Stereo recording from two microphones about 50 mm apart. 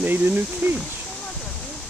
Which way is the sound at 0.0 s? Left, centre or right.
Right.